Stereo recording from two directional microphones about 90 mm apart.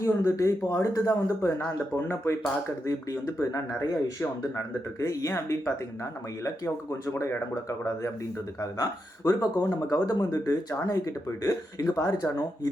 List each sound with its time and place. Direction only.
0.0 s speech: 35° left (ahead or behind)
7.0 s speech: 35° left (ahead or behind)
8.8 s speech: 45° left (ahead or behind)